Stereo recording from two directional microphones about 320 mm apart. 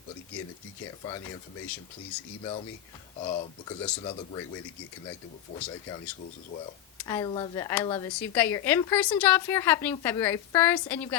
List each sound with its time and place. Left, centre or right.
1.0 s speech: centre
3.2 s speech: centre
5.5 s speech: centre